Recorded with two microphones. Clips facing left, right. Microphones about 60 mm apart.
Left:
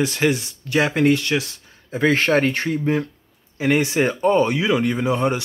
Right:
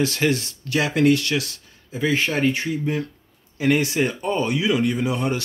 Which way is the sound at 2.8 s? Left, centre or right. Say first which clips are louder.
Left 4 dB; left.